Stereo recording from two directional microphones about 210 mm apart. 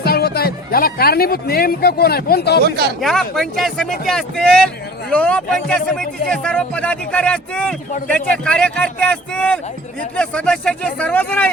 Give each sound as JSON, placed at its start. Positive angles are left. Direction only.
{"t": 0.0, "sound": "speech", "side_deg": 50}
{"t": 2.6, "sound": "speech", "side_deg": -50}
{"t": 3.0, "sound": "speech", "side_deg": 0}